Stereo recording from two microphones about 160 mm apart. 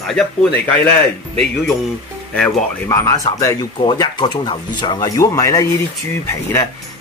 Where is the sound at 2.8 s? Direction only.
20° left (ahead or behind).